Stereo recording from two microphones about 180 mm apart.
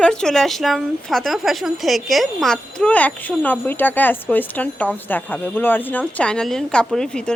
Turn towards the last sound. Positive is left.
turn(degrees=5)  # may be behind; listen again after turning